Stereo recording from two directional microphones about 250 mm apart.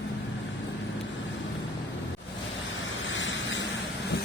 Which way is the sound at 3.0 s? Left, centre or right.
Left.